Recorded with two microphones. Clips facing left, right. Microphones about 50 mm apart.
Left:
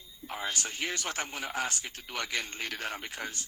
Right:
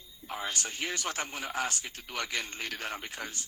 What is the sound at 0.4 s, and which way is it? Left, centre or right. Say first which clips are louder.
Speech: left 1 dB; left.